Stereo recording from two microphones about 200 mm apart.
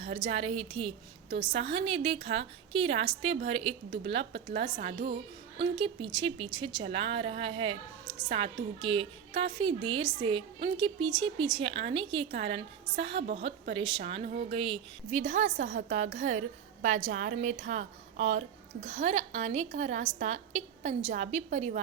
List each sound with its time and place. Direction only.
0.0 s a woman's voice: 30° right (ahead or behind)
13.0 s a woman's voice: 60° right (ahead or behind)
13.2 s a woman's voice: 30° right (ahead or behind)